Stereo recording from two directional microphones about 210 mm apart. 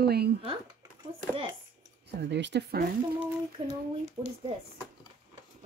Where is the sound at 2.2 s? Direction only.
55° right (ahead or behind).